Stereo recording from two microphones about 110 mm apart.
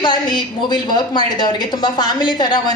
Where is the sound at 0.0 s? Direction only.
40° left (ahead or behind).